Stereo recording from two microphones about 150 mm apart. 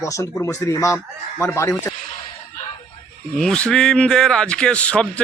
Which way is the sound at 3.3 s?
5° left (ahead or behind).